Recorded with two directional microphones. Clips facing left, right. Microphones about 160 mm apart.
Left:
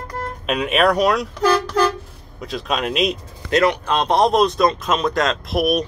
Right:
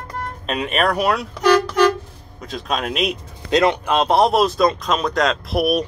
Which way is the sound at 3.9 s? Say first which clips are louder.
Right 1 dB; 5° right (ahead or behind).